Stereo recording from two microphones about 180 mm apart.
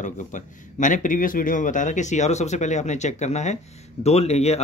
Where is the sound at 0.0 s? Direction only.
45° left (ahead or behind).